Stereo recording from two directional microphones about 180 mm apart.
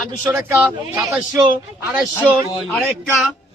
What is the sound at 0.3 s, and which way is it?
A man's voice, 15° right (ahead or behind).